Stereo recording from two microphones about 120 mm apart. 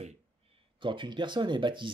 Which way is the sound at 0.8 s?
45° right (ahead or behind).